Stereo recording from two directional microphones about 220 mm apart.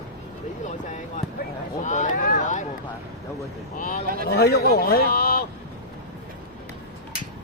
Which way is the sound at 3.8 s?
35° left (ahead or behind).